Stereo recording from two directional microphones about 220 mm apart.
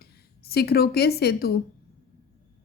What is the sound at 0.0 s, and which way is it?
Speech, 45° left (ahead or behind).